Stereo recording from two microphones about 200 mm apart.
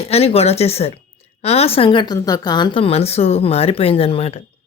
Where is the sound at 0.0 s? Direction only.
30° left (ahead or behind).